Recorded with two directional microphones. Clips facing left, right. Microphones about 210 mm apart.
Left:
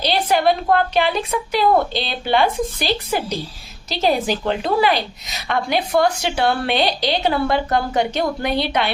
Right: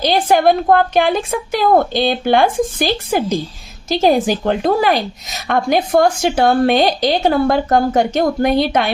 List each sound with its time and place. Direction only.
0.0 s a woman's voice: 50° right (ahead or behind)